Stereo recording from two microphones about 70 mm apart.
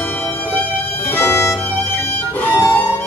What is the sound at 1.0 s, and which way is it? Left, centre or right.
Violin, left.